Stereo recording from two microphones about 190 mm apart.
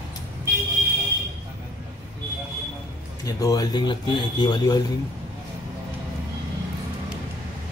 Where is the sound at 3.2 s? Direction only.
20° left (ahead or behind).